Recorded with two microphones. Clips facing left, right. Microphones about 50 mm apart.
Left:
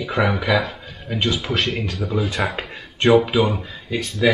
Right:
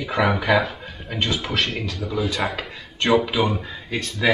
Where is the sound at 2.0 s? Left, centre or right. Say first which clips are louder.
Left 6 dB; centre.